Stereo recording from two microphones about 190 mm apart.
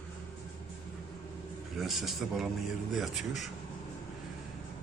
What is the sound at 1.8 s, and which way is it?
A man's voice, centre (ahead or behind).